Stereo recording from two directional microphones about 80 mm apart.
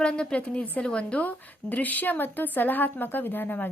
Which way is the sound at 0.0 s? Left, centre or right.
Centre.